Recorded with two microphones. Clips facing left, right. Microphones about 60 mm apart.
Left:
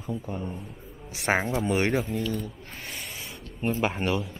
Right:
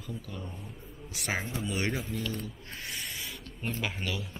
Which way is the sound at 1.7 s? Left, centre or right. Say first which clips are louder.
Left 7 dB; left.